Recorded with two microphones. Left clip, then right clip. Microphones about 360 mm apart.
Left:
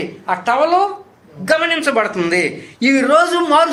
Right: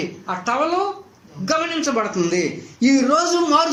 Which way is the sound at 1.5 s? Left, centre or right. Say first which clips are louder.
Left 6 dB; left.